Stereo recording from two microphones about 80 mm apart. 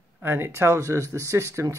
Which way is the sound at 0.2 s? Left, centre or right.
Right.